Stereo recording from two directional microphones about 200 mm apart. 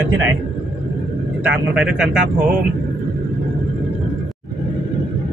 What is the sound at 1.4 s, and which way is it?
Speech, 5° right (ahead or behind).